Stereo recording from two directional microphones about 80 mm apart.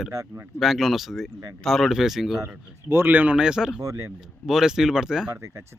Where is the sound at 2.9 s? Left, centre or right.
Right.